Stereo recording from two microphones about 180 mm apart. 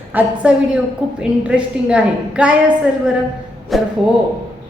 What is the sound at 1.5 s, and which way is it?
A woman's voice, 5° right (ahead or behind).